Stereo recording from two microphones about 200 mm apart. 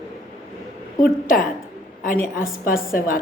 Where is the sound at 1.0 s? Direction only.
45° left (ahead or behind).